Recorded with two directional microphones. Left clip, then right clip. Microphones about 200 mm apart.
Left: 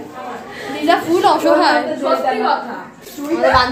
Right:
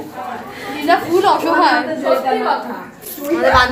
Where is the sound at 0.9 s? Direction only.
30° left (ahead or behind).